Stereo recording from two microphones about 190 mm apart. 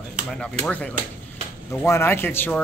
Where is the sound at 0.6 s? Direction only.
5° left (ahead or behind).